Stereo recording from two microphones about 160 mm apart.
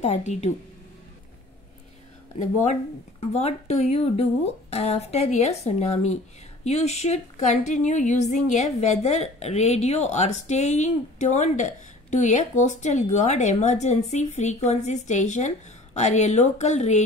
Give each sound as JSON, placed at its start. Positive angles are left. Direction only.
{"t": 0.0, "sound": "speech", "side_deg": 45}
{"t": 3.2, "sound": "speech", "side_deg": 40}